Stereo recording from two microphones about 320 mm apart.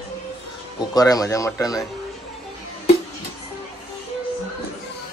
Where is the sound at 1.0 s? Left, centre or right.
Centre.